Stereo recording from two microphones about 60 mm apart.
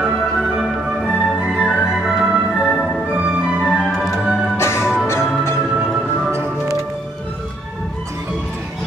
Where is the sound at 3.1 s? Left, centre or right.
Right.